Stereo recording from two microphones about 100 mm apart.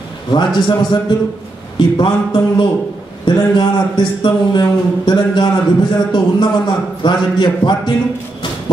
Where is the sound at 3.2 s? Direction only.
50° left (ahead or behind).